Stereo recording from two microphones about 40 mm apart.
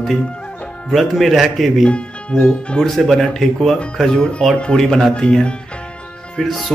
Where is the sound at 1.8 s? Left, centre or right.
Left; by 3.8 s centre.